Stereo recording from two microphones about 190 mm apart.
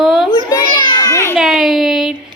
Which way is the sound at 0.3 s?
20° left (ahead or behind).